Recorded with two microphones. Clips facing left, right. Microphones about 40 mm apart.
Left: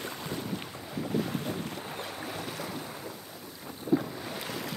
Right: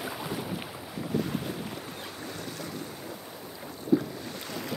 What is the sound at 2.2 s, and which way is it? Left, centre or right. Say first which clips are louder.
Boat: left 1 dB; centre.